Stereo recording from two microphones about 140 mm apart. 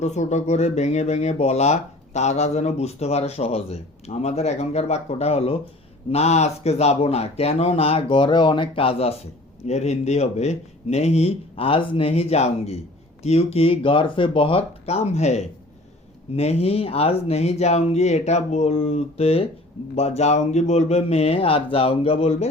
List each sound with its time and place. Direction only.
0.0 s speech: 55° left (ahead or behind)